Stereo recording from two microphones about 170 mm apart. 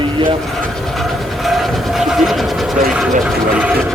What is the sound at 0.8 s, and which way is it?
Vehicle, centre (ahead or behind).